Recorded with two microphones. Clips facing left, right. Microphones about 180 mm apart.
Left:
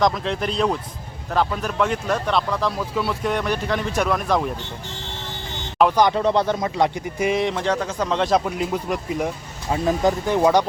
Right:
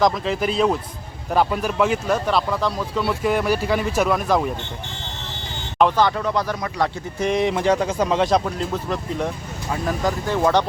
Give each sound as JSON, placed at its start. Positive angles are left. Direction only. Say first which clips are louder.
{"t": 0.0, "sound": "speech", "louder": "right 1 dB", "side_deg": 0}
{"t": 6.0, "sound": "speech", "louder": "left 2 dB", "side_deg": 15}
{"t": 7.3, "sound": "speech", "louder": "right 3 dB", "side_deg": 0}